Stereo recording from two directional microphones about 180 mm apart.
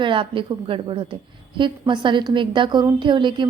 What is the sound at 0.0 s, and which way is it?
A woman's voice, 30° right (ahead or behind).